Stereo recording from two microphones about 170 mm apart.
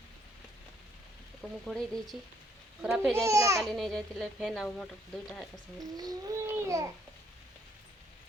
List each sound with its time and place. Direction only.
1.4 s a child's voice: centre (ahead or behind)
3.2 s speech: 15° right (ahead or behind)
3.6 s a child's voice: centre (ahead or behind)
5.8 s a child's voice: 20° right (ahead or behind)